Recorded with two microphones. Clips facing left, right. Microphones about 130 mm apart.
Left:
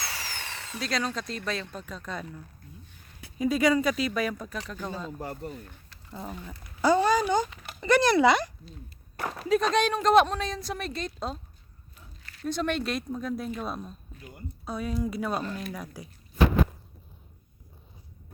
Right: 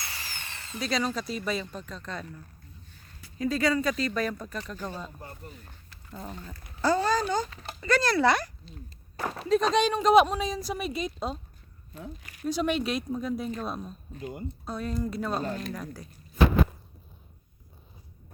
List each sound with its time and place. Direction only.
0.0 s a sound: 90° left
0.8 s speech: centre (ahead or behind)
1.7 s speech: 5° left (ahead or behind)
3.3 s speech: 15° left (ahead or behind)
6.1 s speech: 10° left (ahead or behind)
9.2 s speech: 5° left (ahead or behind)
12.2 s a sound: 15° right (ahead or behind)
12.5 s speech: 5° right (ahead or behind)
14.1 s speech: 30° right (ahead or behind)
14.6 s speech: 5° left (ahead or behind)